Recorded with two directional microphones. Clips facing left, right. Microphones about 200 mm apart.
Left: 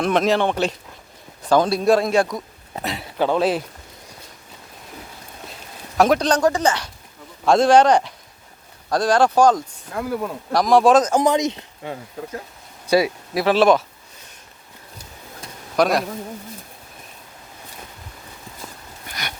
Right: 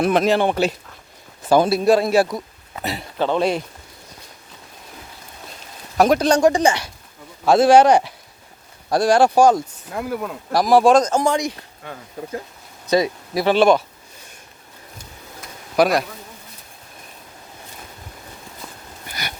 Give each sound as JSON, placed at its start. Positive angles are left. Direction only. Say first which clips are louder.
{"t": 0.0, "sound": "speech", "louder": "right 1 dB", "side_deg": 0}
{"t": 6.0, "sound": "speech", "louder": "right 2 dB", "side_deg": 0}
{"t": 11.1, "sound": "speech", "louder": "left 2 dB", "side_deg": 20}
{"t": 12.9, "sound": "speech", "louder": "even", "side_deg": 5}
{"t": 15.7, "sound": "speech", "louder": "right 1 dB", "side_deg": -5}